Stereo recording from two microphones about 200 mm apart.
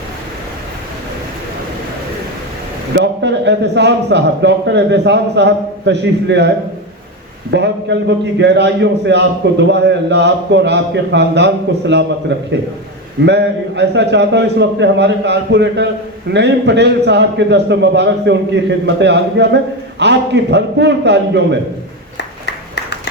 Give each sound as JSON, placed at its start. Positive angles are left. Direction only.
{"t": 2.9, "sound": "a man's voice", "side_deg": -60}
{"t": 7.5, "sound": "a man's voice", "side_deg": -60}
{"t": 22.4, "sound": "clapping", "side_deg": 55}